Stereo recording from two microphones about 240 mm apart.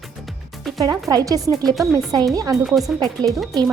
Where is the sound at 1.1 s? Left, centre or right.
Centre.